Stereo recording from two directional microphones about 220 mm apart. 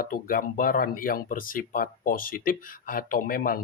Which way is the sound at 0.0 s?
40° left (ahead or behind).